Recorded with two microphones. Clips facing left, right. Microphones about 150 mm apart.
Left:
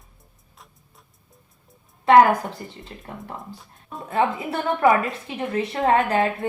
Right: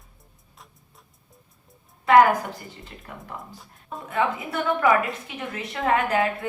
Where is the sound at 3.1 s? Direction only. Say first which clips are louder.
Left 3 dB; 30° left (ahead or behind).